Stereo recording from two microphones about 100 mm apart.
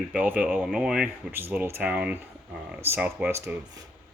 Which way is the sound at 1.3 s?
20° right (ahead or behind).